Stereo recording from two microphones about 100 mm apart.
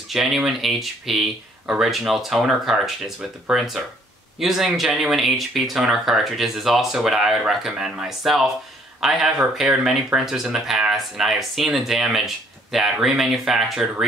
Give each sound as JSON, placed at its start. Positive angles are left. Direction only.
{"t": 0.1, "sound": "speech", "side_deg": 0}